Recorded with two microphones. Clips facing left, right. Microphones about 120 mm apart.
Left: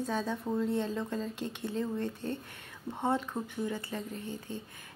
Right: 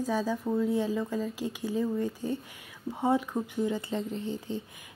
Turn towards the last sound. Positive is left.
turn(degrees=-20)  # may be behind; listen again after turning